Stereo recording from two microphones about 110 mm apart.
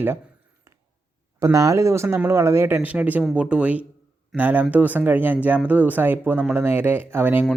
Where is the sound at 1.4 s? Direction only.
30° right (ahead or behind).